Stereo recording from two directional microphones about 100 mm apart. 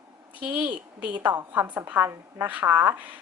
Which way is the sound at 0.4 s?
15° right (ahead or behind).